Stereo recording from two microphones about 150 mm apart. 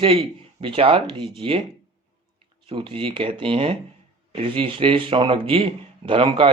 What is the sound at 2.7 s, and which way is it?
Speech, 35° right (ahead or behind).